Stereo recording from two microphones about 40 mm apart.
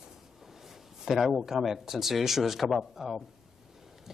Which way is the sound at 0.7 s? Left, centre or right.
Centre.